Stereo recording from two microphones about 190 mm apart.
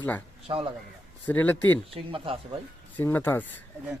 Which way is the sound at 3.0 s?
10° left (ahead or behind).